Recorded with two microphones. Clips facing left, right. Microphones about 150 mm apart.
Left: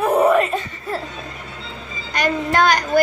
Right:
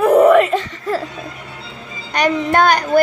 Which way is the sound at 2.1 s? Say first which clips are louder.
Right 4 dB; 55° right (ahead or behind).